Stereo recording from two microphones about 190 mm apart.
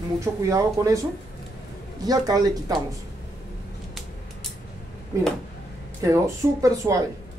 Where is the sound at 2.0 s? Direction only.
20° right (ahead or behind).